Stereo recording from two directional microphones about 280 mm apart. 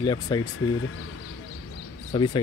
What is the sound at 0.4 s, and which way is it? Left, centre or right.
Speech, left.